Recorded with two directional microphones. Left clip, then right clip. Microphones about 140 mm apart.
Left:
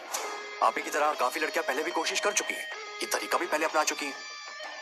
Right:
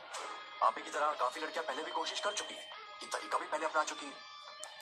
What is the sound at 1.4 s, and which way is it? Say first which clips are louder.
Speech: left 9 dB; 55° left (ahead or behind).